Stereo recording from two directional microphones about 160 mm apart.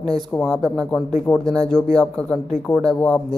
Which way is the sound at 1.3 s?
5° left (ahead or behind).